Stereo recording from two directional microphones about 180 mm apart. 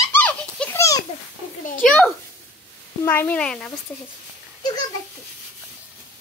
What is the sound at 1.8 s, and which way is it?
A child's voice, 5° left (ahead or behind).